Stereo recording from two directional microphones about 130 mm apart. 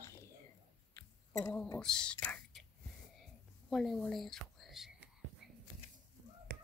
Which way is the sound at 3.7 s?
Centre (ahead or behind).